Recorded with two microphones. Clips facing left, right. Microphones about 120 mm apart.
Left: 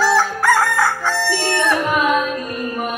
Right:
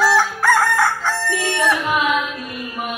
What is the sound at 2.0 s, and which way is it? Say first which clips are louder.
Music: left 3 dB; 45° left (ahead or behind).